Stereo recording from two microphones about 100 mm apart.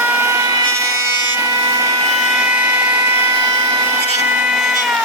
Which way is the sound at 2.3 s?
10° right (ahead or behind).